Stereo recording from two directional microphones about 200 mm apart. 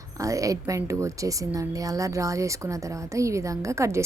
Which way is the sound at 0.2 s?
15° right (ahead or behind).